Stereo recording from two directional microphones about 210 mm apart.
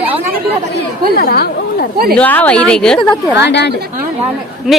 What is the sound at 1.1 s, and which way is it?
Speech, 45° left (ahead or behind).